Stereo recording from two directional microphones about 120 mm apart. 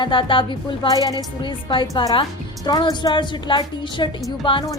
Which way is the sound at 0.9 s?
30° left (ahead or behind).